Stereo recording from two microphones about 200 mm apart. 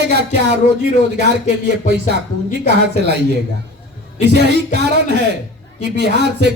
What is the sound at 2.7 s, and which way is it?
Speech, 55° right (ahead or behind).